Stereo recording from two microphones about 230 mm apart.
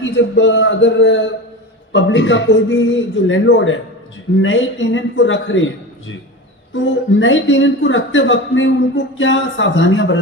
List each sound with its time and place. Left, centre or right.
0.0 s speech: left